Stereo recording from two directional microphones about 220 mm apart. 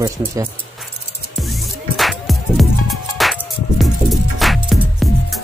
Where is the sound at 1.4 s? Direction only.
Centre (ahead or behind).